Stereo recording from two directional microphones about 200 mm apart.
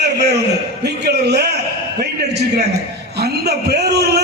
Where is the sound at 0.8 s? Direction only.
55° right (ahead or behind).